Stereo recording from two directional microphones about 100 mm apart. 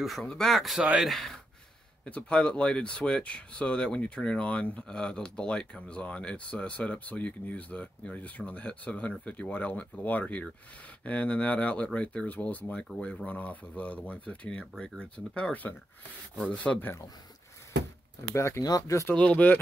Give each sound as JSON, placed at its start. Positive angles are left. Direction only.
{"t": 0.2, "sound": "speech", "side_deg": 5}
{"t": 2.0, "sound": "speech", "side_deg": 10}
{"t": 18.3, "sound": "speech", "side_deg": 30}
{"t": 19.1, "sound": "speech", "side_deg": 10}